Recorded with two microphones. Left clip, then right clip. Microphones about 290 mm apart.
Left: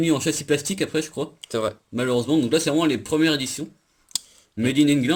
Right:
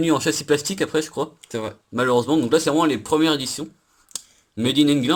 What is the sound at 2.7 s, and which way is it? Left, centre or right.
Speech, centre.